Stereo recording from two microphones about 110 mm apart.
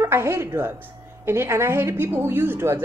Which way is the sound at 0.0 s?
25° right (ahead or behind).